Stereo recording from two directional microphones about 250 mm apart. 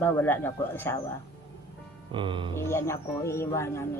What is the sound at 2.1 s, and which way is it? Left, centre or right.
Speech, centre.